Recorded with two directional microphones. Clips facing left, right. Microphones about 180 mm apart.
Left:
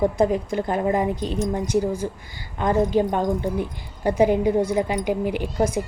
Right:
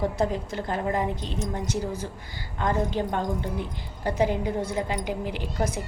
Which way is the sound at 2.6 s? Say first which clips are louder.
Left 6 dB; 15° left (ahead or behind).